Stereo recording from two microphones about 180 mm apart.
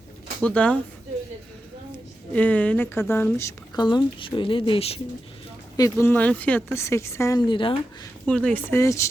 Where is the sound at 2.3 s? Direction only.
10° left (ahead or behind); by 5.0 s 30° left (ahead or behind).